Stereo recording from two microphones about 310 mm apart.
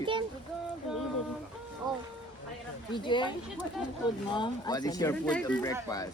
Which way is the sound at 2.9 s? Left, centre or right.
Centre.